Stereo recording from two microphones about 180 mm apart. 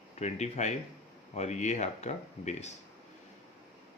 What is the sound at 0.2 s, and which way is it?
Speech, 40° left (ahead or behind).